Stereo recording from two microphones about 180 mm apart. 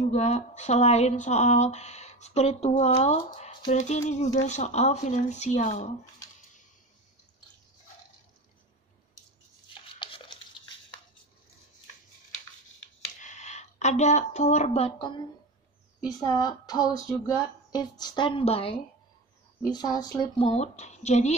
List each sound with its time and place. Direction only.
0.1 s speech: 40° left (ahead or behind)
9.8 s a sound: 30° left (ahead or behind)
13.2 s a woman's voice: 40° left (ahead or behind)
19.6 s speech: 25° left (ahead or behind)
20.4 s speech: 40° left (ahead or behind)